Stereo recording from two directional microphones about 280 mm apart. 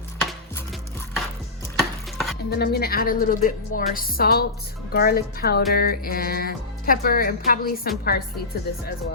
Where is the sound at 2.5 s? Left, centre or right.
Left.